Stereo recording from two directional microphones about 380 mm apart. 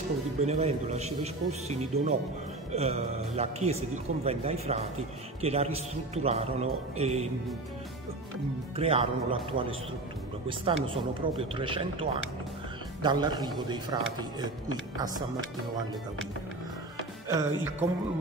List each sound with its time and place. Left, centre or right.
0.4 s a man's voice: centre
8.7 s a man's voice: centre
17.3 s a man's voice: centre